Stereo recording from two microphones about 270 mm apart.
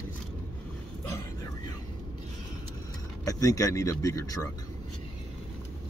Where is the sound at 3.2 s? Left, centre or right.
Centre.